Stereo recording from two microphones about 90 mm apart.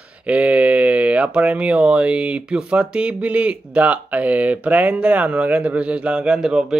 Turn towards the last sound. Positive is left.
turn(degrees=-5)  # may be behind; listen again after turning